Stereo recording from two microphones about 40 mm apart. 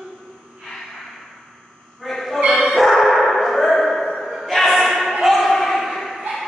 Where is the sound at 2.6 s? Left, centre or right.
Centre.